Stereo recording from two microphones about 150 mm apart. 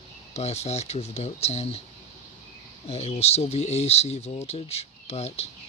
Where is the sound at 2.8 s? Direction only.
45° left (ahead or behind).